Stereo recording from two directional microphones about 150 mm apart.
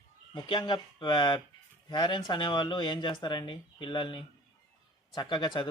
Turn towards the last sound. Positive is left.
turn(degrees=30)  # may be behind; listen again after turning